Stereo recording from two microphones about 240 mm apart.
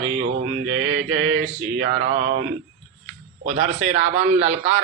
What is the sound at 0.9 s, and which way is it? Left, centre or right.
Mantra, right.